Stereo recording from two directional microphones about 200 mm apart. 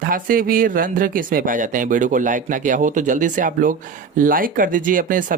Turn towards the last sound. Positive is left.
turn(degrees=-40)  # may be behind; listen again after turning